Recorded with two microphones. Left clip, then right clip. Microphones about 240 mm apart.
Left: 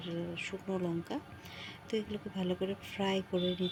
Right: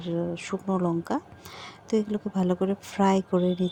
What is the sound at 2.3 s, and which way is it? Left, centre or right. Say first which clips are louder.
Speech: right 9 dB; right.